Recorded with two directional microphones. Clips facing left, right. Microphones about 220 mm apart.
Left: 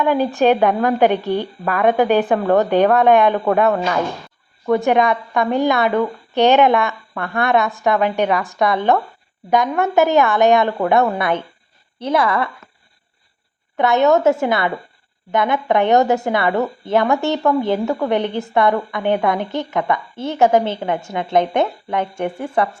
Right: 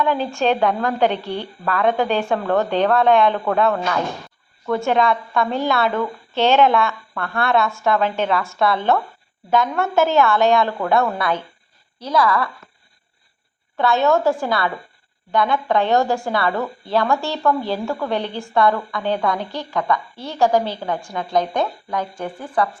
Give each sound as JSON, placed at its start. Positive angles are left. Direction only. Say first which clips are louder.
{"t": 0.0, "sound": "a woman's voice", "louder": "left 4 dB", "side_deg": 15}
{"t": 13.7, "sound": "a woman's voice", "louder": "left 3 dB", "side_deg": 20}